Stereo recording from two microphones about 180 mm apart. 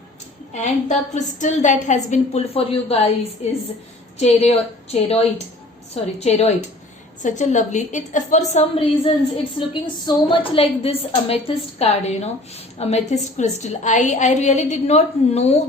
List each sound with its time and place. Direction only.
0.5 s a woman's voice: 40° left (ahead or behind)
4.2 s a woman's voice: 35° left (ahead or behind)